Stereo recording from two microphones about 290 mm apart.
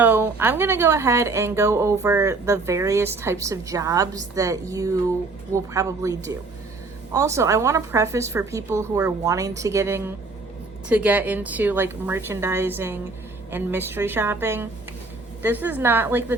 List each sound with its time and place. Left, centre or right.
0.0 s speech: centre